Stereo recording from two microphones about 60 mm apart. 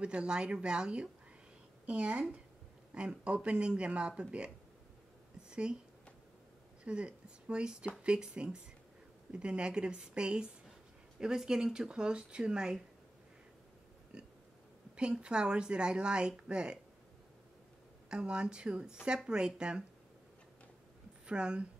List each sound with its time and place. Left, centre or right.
0.0 s speech: centre
5.5 s speech: centre
6.8 s speech: centre
14.1 s a sound: centre
15.0 s speech: centre
18.1 s speech: centre
21.3 s speech: centre